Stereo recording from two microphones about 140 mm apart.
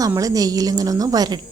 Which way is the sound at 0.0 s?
25° right (ahead or behind).